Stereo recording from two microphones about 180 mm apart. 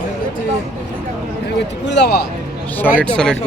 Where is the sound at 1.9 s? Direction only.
75° left (ahead or behind).